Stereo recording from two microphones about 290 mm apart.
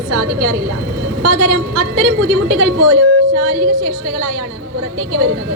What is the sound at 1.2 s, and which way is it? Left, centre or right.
A woman's voice, right.